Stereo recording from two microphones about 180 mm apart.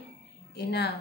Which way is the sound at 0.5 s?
65° left (ahead or behind).